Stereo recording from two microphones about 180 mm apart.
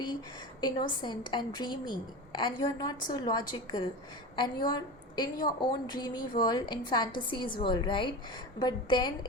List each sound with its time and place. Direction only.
0.6 s a woman's voice: 25° left (ahead or behind)